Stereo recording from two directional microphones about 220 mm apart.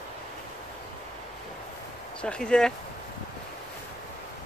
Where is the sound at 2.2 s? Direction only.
5° left (ahead or behind).